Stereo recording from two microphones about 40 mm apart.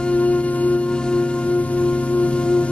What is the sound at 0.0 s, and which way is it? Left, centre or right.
Music, left.